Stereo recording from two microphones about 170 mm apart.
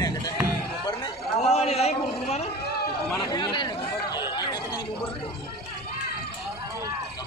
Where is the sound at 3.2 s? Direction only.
25° left (ahead or behind).